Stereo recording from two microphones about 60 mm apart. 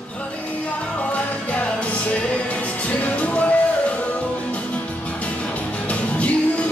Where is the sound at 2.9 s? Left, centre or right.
Left.